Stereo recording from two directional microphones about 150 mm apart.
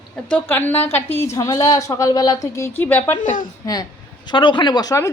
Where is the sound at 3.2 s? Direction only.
60° left (ahead or behind).